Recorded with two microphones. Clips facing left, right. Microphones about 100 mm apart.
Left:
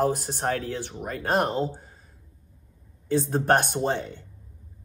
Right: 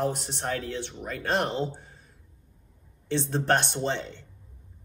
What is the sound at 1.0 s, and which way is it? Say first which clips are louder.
Speech: left 3 dB; 45° left (ahead or behind).